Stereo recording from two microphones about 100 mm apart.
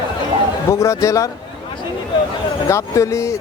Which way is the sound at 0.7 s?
30° left (ahead or behind).